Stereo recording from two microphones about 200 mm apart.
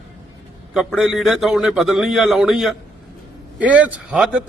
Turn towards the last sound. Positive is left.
turn(degrees=-5)  # may be behind; listen again after turning